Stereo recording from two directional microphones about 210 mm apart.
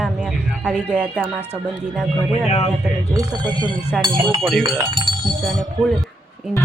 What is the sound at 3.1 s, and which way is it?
Speech, 20° right (ahead or behind).